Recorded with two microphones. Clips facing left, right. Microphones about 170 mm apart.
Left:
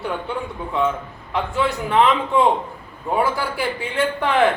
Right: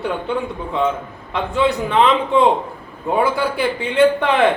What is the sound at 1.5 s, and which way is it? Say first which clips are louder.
Speech: right 3 dB; 20° right (ahead or behind).